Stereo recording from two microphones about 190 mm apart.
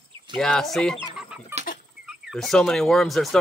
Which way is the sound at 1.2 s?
5° right (ahead or behind).